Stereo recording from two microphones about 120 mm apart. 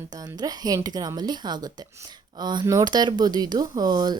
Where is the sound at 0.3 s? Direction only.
30° right (ahead or behind).